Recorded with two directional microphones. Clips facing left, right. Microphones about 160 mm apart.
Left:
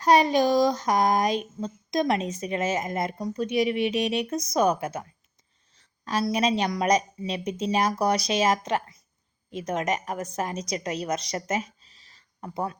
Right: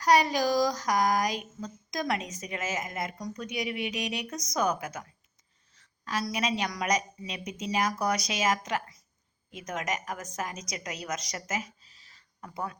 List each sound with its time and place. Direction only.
0.0 s a woman's voice: 25° left (ahead or behind)